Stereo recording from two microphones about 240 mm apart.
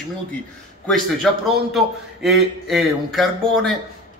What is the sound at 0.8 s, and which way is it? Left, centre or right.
A man's voice, centre.